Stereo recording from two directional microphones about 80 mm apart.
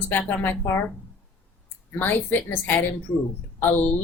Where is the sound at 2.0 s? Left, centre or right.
Left.